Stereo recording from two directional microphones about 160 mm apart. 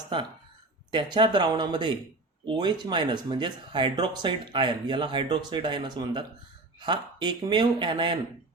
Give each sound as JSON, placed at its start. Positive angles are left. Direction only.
{"t": 1.1, "sound": "speech", "side_deg": -30}